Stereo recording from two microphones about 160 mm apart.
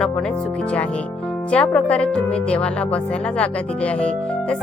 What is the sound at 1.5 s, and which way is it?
Speech, 5° left (ahead or behind).